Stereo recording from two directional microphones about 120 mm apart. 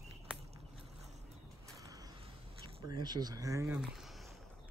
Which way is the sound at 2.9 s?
35° right (ahead or behind).